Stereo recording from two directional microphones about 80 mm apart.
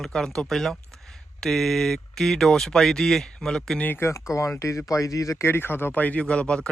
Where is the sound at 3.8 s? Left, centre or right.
Left; by 6.6 s centre.